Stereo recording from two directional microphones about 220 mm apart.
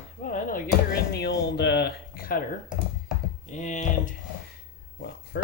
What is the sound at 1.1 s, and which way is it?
Speech, 50° left (ahead or behind).